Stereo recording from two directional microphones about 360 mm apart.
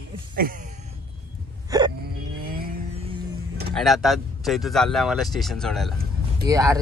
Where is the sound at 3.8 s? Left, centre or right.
Centre.